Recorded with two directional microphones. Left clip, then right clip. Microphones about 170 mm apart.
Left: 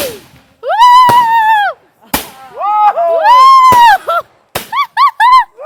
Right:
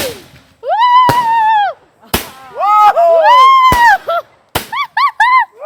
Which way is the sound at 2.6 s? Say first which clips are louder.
Right 2 dB; 85° right.